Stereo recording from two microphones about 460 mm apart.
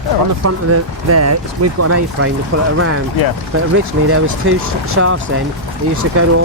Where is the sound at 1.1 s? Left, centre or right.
Right.